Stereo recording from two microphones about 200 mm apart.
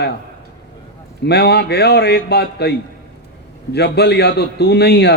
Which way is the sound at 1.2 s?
55° left (ahead or behind).